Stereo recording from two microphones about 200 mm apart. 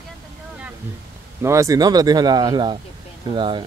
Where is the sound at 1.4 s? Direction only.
15° right (ahead or behind).